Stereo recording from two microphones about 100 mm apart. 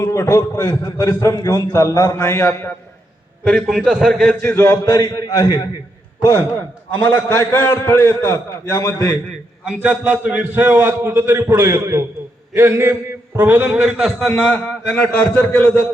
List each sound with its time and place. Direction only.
0.0 s a man's voice: 30° left (ahead or behind)
3.4 s a man's voice: centre (ahead or behind)
4.4 s a man's voice: 30° left (ahead or behind)
7.0 s a man's voice: 25° left (ahead or behind)
9.6 s a man's voice: 10° right (ahead or behind)
13.7 s a man's voice: 5° right (ahead or behind)
14.4 s a man's voice: 10° left (ahead or behind)